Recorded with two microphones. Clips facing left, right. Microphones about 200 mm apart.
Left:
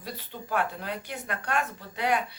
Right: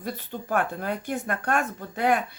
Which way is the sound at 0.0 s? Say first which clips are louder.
Right 6 dB; 50° right (ahead or behind).